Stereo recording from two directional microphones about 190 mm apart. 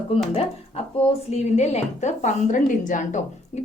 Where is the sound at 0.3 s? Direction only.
35° left (ahead or behind).